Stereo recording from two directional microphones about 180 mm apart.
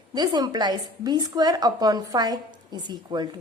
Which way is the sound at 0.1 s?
25° right (ahead or behind).